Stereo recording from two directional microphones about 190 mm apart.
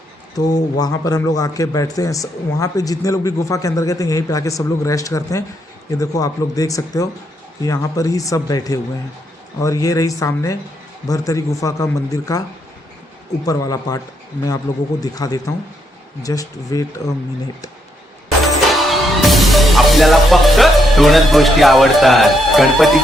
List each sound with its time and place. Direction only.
0.3 s speech: 20° left (ahead or behind)
13.4 s speech: 20° left (ahead or behind)
15.0 s speech: 20° left (ahead or behind)
18.7 s music: centre (ahead or behind)